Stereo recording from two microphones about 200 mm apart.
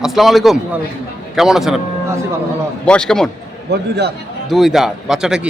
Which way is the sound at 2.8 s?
5° left (ahead or behind).